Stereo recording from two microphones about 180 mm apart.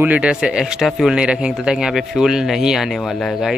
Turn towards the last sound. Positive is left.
turn(degrees=0)  # may be behind; listen again after turning